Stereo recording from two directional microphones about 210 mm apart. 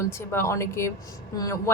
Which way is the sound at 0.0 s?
15° left (ahead or behind).